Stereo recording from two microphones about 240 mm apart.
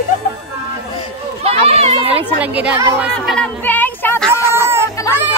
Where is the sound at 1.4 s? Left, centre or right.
Right.